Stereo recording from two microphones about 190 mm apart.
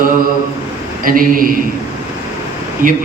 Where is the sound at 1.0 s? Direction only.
45° right (ahead or behind).